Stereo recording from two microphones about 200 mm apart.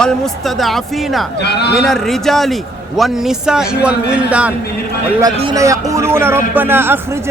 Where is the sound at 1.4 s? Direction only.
55° left (ahead or behind).